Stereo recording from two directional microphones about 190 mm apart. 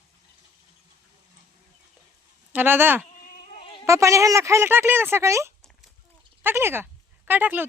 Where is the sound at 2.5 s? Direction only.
10° right (ahead or behind).